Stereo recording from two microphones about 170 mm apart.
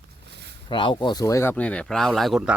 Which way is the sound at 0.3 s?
80° right.